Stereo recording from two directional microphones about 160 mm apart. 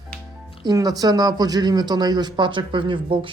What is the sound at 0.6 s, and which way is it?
Speech, 25° right (ahead or behind).